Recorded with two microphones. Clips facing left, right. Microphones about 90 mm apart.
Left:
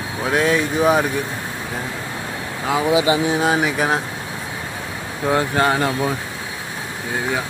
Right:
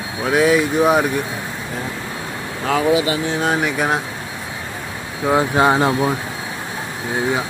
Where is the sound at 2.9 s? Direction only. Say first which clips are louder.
Left 4 dB; 20° left (ahead or behind).